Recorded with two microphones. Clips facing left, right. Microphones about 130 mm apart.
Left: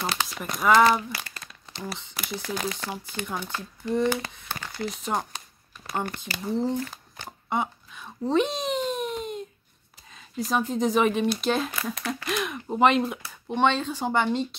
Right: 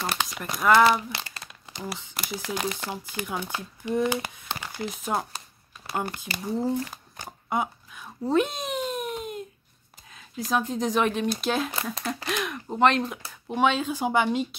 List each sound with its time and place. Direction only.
0.0 s crumpling: centre (ahead or behind)
0.7 s speech: 5° right (ahead or behind)
1.7 s a sound: 15° right (ahead or behind)
2.0 s speech: 5° right (ahead or behind)
7.2 s a sound: 5° right (ahead or behind)
10.1 s speech: centre (ahead or behind)
11.7 s speech: 30° right (ahead or behind)
12.3 s speech: centre (ahead or behind)